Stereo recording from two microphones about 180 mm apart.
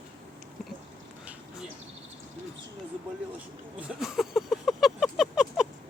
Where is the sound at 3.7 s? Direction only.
5° right (ahead or behind).